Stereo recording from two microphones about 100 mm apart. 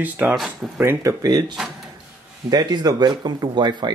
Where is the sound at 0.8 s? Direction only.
25° right (ahead or behind).